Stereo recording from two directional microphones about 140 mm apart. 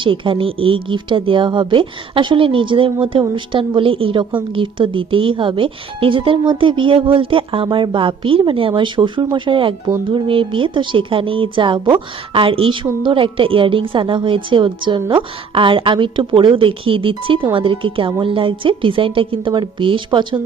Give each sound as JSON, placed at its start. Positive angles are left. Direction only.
{"t": 0.0, "sound": "speech", "side_deg": -35}